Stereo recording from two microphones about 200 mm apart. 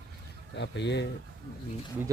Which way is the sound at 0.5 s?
60° left (ahead or behind).